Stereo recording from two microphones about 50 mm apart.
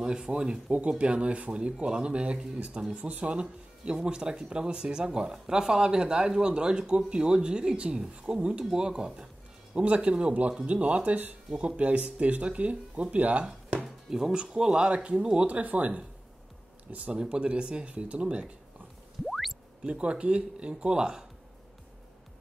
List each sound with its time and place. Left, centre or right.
0.0 s speech: centre
9.8 s speech: right
13.8 s speech: centre; by 16.0 s right
17.1 s speech: centre
19.2 s music: centre
19.8 s speech: right